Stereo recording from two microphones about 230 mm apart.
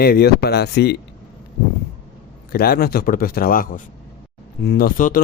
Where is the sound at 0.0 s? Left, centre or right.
Left.